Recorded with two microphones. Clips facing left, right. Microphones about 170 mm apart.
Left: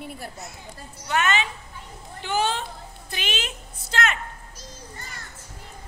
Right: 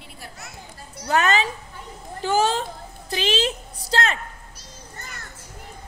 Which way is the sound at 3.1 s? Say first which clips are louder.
Right 9 dB; 35° right (ahead or behind).